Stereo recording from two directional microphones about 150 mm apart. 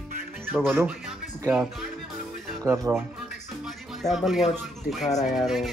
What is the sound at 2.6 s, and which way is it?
Speech, 20° right (ahead or behind).